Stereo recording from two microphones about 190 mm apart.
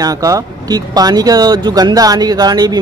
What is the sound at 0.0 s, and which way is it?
Speech, 20° right (ahead or behind).